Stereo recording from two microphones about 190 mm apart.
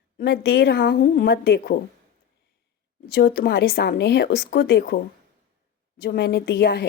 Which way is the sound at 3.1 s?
55° left (ahead or behind).